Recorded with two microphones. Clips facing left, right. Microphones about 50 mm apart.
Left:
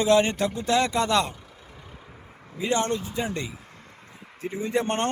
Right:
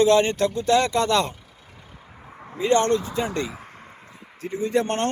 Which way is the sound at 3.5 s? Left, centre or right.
Right.